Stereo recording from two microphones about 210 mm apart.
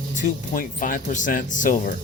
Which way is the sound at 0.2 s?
40° left (ahead or behind).